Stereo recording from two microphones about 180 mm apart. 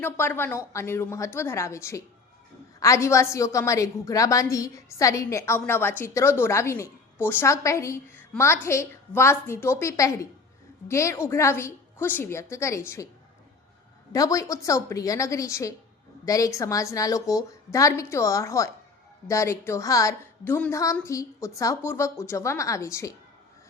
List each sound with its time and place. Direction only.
0.0 s a woman's voice: 10° left (ahead or behind)
14.1 s a woman's voice: 20° left (ahead or behind)